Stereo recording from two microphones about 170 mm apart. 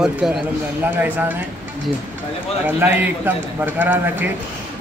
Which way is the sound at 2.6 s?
10° right (ahead or behind).